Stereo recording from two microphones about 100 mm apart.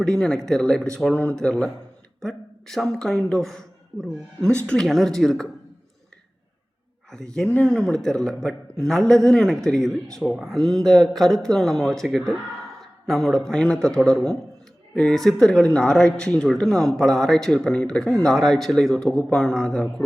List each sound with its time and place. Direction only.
0.0 s speech: 5° left (ahead or behind)
7.1 s speech: 5° left (ahead or behind)
7.4 s speech: 15° left (ahead or behind)